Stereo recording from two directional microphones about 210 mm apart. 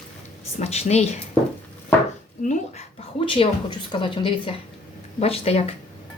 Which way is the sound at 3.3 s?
25° left (ahead or behind).